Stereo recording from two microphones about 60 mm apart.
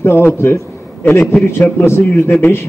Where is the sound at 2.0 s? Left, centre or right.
Left.